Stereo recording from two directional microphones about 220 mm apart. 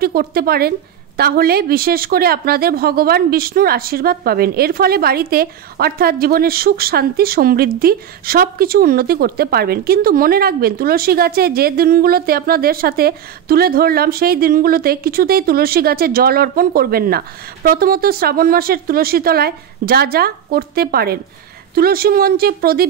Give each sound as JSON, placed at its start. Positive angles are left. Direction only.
{"t": 0.0, "sound": "a woman's voice", "side_deg": -45}